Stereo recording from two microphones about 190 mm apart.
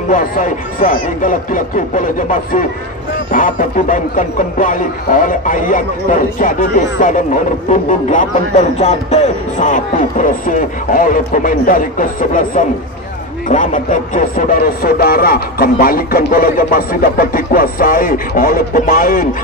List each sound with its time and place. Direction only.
0.1 s speech: 45° left (ahead or behind)
3.3 s speech: 40° left (ahead or behind)
14.1 s speech: 50° left (ahead or behind)